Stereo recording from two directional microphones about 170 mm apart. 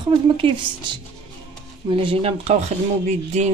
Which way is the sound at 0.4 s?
30° right (ahead or behind).